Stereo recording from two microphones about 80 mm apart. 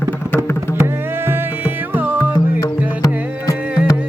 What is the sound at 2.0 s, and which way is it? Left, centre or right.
Music, right.